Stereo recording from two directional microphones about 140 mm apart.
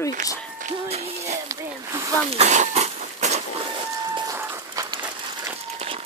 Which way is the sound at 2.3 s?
55° right (ahead or behind).